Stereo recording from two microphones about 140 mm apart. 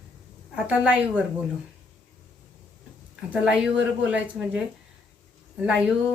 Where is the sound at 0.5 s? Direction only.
10° right (ahead or behind).